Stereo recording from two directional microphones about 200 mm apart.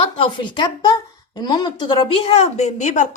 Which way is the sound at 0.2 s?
25° left (ahead or behind).